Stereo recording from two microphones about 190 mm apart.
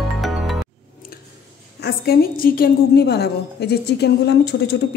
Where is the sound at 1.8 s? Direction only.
55° left (ahead or behind).